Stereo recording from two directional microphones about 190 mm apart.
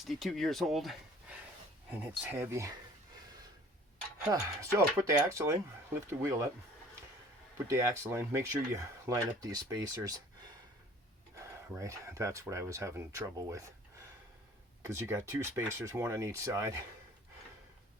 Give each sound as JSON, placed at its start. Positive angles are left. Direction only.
{"t": 0.0, "sound": "speech", "side_deg": 0}
{"t": 4.3, "sound": "speech", "side_deg": -15}
{"t": 7.7, "sound": "speech", "side_deg": -15}
{"t": 11.3, "sound": "speech", "side_deg": -15}
{"t": 14.8, "sound": "speech", "side_deg": -15}